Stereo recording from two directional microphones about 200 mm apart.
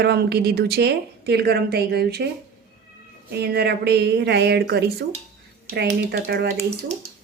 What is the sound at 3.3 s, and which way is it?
Speech, 55° right (ahead or behind).